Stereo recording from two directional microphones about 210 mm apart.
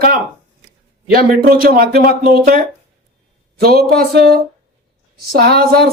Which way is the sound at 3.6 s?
45° right (ahead or behind).